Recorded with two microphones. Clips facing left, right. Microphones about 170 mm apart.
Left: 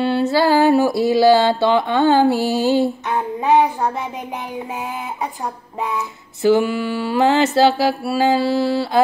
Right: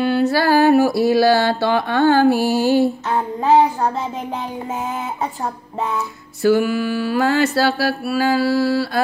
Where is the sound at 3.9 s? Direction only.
15° left (ahead or behind).